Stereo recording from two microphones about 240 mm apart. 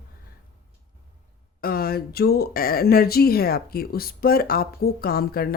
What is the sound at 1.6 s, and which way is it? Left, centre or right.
Speech, left.